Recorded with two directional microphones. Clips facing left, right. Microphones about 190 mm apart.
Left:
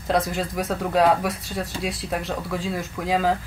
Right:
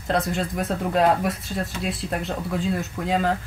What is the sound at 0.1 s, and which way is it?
Speech, centre (ahead or behind).